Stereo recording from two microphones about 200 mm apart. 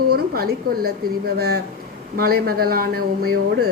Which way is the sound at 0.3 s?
50° right (ahead or behind).